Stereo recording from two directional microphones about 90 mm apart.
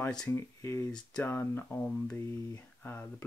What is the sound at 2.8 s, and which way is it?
Speech, 20° left (ahead or behind).